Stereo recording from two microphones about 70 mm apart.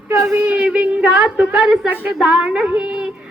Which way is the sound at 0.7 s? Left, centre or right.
Right.